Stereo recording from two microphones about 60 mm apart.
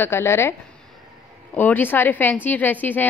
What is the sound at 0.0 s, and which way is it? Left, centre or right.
Speech, left.